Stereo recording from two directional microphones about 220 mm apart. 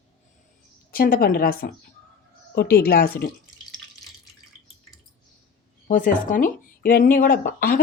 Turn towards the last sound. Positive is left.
turn(degrees=40)  # may be behind; listen again after turning